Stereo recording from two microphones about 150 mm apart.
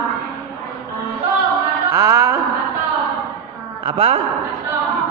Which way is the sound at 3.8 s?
40° right (ahead or behind).